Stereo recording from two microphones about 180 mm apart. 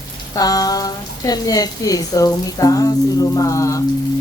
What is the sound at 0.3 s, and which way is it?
A woman's voice, 20° left (ahead or behind).